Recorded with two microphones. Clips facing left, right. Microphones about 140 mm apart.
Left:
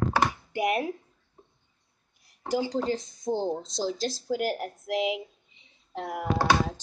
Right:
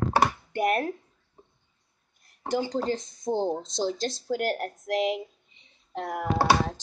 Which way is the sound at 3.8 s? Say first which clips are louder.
Right 1 dB; 5° left (ahead or behind).